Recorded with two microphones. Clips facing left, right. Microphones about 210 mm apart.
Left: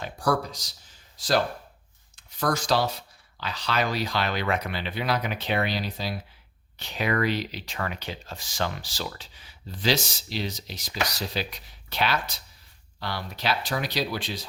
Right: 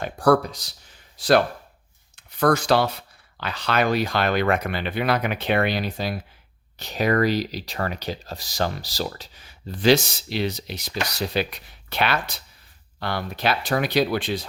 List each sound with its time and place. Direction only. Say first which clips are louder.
0.0 s speech: right 7 dB; 60° right (ahead or behind)
6.7 s speech: right 5 dB; 40° right (ahead or behind)